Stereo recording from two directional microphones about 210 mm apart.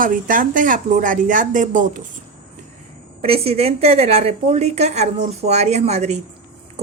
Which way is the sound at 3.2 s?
30° right (ahead or behind).